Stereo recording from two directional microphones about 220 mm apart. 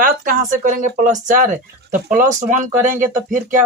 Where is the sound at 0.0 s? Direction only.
35° right (ahead or behind).